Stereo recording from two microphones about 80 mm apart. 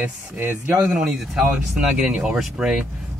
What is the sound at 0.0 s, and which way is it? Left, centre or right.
Speech, right.